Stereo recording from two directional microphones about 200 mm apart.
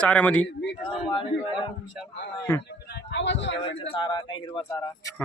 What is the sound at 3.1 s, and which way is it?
Speech, 65° left (ahead or behind).